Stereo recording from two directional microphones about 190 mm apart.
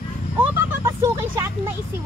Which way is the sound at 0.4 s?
15° right (ahead or behind).